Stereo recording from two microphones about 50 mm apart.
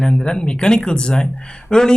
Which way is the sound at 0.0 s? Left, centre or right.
Centre.